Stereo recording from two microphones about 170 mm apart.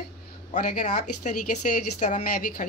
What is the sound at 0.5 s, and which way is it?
Speech, 50° left (ahead or behind).